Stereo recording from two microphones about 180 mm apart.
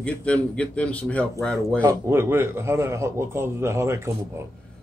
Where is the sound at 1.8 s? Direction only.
15° right (ahead or behind).